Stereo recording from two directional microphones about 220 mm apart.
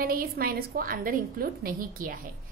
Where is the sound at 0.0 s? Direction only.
40° right (ahead or behind).